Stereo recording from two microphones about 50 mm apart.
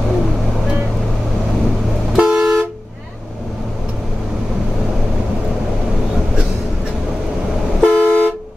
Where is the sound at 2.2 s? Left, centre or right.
Centre.